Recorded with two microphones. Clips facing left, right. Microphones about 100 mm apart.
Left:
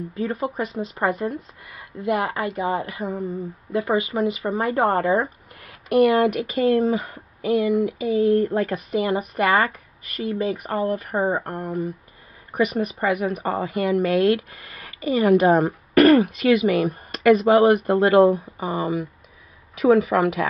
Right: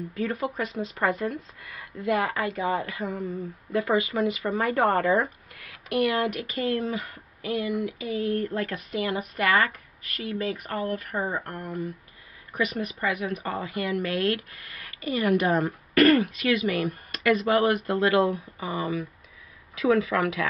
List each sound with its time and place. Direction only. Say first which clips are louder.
0.1 s speech: left 3 dB; 30° left (ahead or behind)
6.3 s speech: left 8 dB; 20° left (ahead or behind)
13.4 s speech: left 7 dB; 35° left (ahead or behind)
14.1 s speech: left 8 dB; 25° left (ahead or behind)